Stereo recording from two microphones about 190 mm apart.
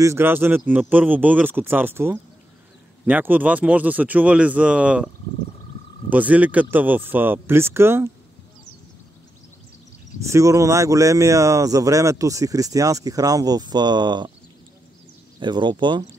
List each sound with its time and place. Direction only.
0.0 s speech: 15° right (ahead or behind)
10.2 s speech: 15° right (ahead or behind)
15.3 s speech: 25° right (ahead or behind)